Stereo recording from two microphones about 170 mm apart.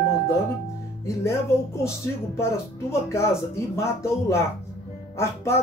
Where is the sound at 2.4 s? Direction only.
15° left (ahead or behind).